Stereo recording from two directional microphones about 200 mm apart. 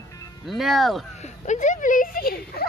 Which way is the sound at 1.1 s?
35° left (ahead or behind).